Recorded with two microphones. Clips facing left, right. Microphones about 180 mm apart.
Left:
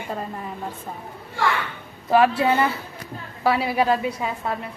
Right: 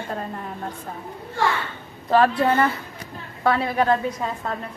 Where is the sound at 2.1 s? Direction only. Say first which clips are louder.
Even; 10° left (ahead or behind).